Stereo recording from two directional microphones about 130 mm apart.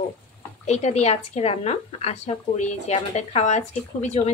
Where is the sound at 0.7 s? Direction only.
60° left (ahead or behind).